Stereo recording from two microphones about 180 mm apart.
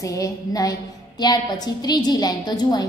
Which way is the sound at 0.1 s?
20° left (ahead or behind).